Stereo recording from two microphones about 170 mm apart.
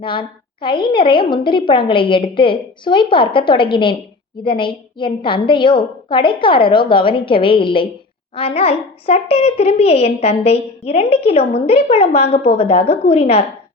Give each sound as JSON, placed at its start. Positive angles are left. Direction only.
{"t": 0.0, "sound": "a woman's voice", "side_deg": 30}